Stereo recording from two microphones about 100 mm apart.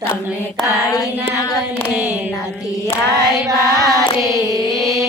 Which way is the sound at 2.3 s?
30° left (ahead or behind).